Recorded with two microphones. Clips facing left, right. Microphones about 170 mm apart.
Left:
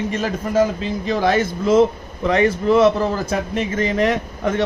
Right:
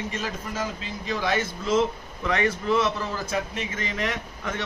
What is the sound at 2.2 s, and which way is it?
Speech, 30° left (ahead or behind).